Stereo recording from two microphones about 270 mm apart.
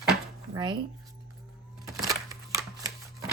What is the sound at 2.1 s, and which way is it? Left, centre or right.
Shuffling cards, centre.